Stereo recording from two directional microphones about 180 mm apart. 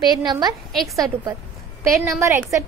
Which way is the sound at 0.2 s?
25° right (ahead or behind).